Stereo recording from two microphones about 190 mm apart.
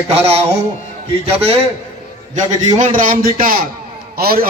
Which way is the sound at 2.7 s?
45° right (ahead or behind).